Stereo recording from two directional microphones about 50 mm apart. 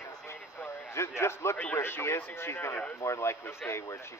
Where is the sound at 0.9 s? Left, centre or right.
Left.